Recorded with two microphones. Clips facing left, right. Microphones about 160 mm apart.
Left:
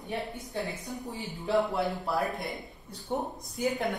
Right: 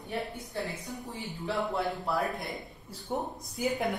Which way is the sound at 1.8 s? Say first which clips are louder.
Left 1 dB; centre (ahead or behind).